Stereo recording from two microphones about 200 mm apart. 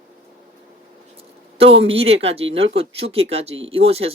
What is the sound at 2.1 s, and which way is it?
Speech, 30° right (ahead or behind).